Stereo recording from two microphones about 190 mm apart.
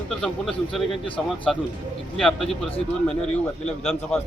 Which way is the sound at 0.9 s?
25° left (ahead or behind).